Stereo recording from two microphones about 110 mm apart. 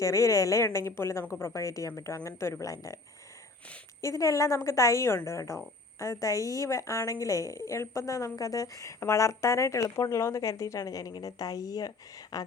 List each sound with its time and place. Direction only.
0.0 s a woman's voice: 30° left (ahead or behind)
4.0 s a woman's voice: 30° left (ahead or behind)